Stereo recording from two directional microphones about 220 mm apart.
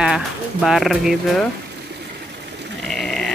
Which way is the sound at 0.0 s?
5° right (ahead or behind).